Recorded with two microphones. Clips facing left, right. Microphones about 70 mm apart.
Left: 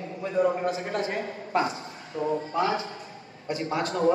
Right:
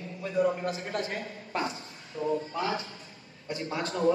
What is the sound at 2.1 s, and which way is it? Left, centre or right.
Speech, left.